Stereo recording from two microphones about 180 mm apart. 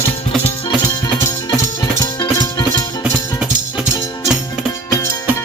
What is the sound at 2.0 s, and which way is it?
Music, 20° left (ahead or behind).